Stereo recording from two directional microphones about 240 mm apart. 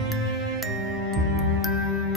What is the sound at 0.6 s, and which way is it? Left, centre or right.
Music, centre.